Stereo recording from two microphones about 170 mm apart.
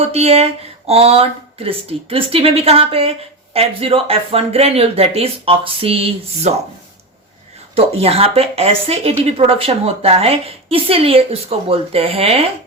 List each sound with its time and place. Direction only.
0.0 s speech: 35° right (ahead or behind)
7.8 s speech: 35° right (ahead or behind)